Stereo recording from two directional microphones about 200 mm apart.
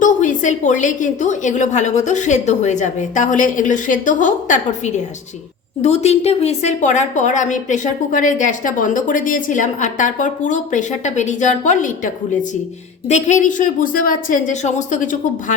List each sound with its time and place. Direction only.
0.0 s a woman's voice: 40° left (ahead or behind)